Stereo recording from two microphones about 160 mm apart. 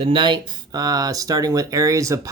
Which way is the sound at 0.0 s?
30° right (ahead or behind).